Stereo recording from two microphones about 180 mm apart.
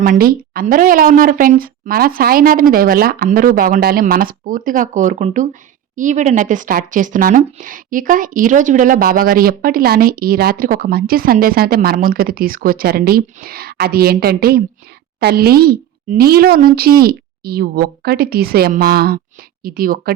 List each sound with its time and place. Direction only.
0.0 s speech: 55° right (ahead or behind)